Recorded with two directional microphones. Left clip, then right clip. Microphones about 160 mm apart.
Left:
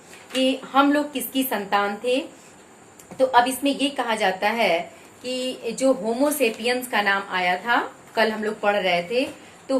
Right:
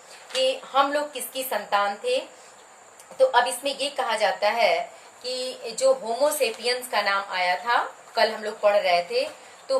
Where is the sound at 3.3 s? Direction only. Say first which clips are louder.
Left 3 dB; 20° left (ahead or behind).